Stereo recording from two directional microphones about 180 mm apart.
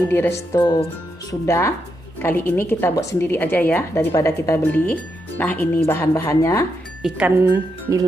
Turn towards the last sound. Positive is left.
turn(degrees=-10)  # may be behind; listen again after turning